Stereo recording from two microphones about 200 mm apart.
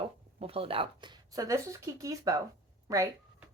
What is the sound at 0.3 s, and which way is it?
A woman's voice, 30° right (ahead or behind).